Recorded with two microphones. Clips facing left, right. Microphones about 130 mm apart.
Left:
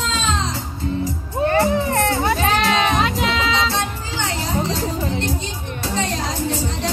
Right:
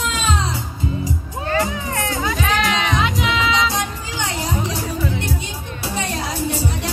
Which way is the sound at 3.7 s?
15° right (ahead or behind).